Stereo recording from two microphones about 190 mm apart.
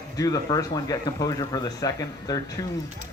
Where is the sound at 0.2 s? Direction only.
20° left (ahead or behind).